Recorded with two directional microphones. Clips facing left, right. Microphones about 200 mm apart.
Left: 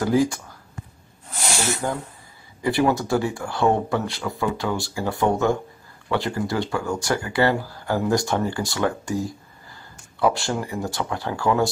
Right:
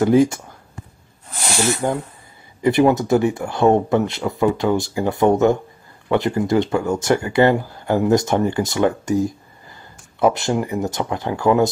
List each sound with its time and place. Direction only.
0.0 s speech: 25° right (ahead or behind)
1.8 s speech: 20° right (ahead or behind)